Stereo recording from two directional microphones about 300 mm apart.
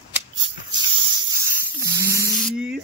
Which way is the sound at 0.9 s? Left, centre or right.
Centre.